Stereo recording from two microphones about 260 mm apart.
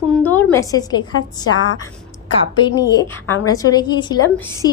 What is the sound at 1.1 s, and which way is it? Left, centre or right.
Speech, left.